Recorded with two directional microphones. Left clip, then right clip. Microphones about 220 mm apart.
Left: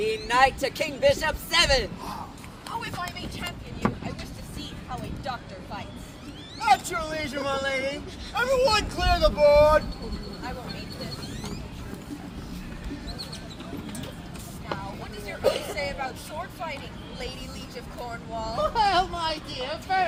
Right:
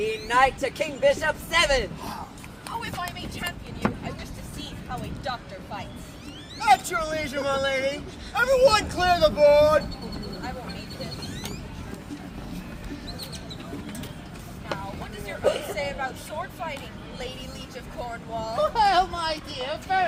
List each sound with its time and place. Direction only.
0.0 s speech: 35° left (ahead or behind)
2.6 s vehicle: 5° right (ahead or behind)
3.0 s speech: 5° right (ahead or behind)
3.8 s vehicle: 15° right (ahead or behind)
4.9 s speech: 5° right (ahead or behind)
15.4 s speech: 35° left (ahead or behind)
15.7 s speech: 5° left (ahead or behind)
18.0 s speech: centre (ahead or behind)
18.5 s speech: 10° right (ahead or behind)